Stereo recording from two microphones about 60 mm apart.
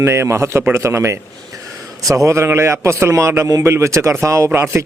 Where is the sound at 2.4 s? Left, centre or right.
Right.